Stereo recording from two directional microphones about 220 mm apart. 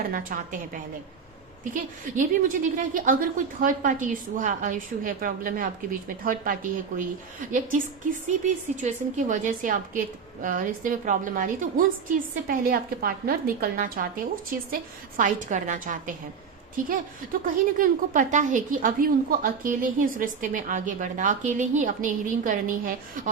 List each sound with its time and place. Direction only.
0.1 s a woman's voice: 40° right (ahead or behind)
8.3 s a woman's voice: 35° right (ahead or behind)
17.4 s a woman's voice: 40° right (ahead or behind)